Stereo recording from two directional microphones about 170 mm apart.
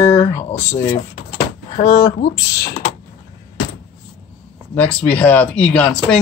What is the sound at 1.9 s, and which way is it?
Speech, 30° left (ahead or behind).